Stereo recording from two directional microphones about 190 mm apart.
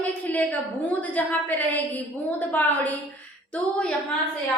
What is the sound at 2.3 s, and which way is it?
A woman's voice, 10° left (ahead or behind).